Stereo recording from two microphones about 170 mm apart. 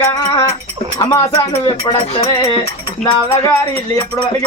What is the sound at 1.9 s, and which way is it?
Rattle, 30° left (ahead or behind).